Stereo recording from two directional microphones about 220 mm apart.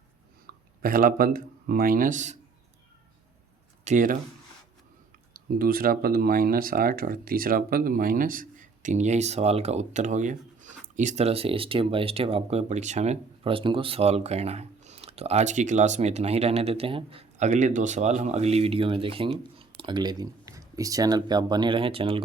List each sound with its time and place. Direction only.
0.4 s speech: 40° right (ahead or behind)
3.8 s speech: 35° right (ahead or behind)
5.3 s speech: 40° right (ahead or behind); by 22.2 s 25° right (ahead or behind)